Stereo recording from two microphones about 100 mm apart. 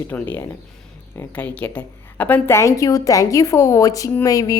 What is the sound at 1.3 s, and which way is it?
A woman's voice, 15° left (ahead or behind).